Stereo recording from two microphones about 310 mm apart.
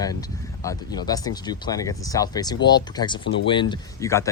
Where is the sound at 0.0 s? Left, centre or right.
Centre.